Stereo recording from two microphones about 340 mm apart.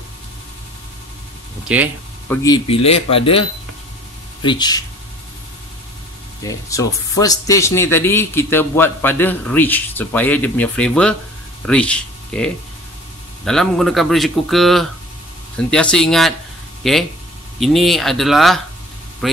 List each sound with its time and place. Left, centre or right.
1.7 s speech: centre
6.4 s speech: centre
13.5 s speech: centre